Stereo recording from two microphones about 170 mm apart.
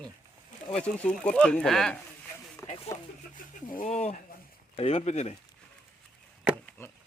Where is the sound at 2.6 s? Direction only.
15° left (ahead or behind).